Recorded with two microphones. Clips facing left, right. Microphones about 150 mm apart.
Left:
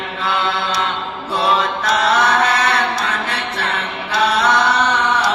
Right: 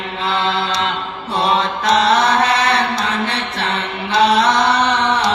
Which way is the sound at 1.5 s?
30° right (ahead or behind).